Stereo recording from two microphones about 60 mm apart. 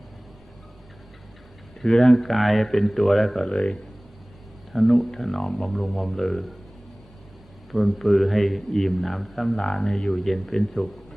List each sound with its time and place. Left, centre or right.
1.8 s a man's voice: centre
4.7 s a man's voice: centre
7.7 s a man's voice: centre